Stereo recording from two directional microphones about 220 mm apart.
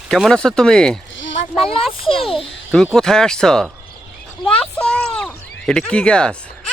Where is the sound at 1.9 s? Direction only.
25° left (ahead or behind).